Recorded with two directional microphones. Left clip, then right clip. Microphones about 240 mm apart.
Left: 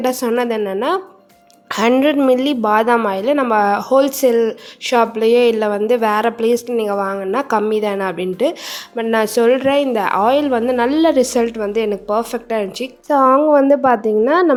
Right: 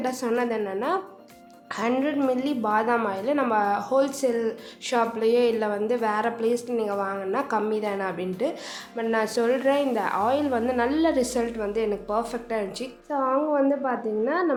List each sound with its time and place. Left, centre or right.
0.0 s a woman's voice: left